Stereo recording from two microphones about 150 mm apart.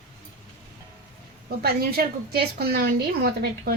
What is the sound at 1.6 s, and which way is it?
A woman's voice, 85° right.